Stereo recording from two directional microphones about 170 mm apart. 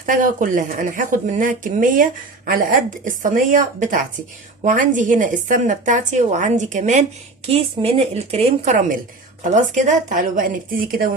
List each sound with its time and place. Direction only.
0.0 s a woman's voice: 50° right (ahead or behind)